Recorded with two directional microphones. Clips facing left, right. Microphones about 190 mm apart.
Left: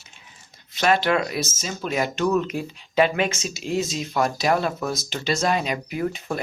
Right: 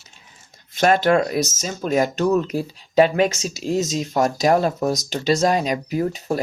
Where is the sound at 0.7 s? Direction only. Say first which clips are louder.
Right 4 dB; 45° right (ahead or behind).